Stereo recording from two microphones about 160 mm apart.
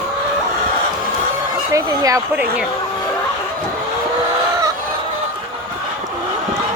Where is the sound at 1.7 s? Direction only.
20° right (ahead or behind).